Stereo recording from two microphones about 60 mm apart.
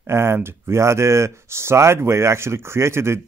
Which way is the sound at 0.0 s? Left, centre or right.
Right.